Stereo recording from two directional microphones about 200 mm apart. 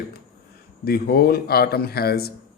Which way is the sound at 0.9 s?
50° left (ahead or behind).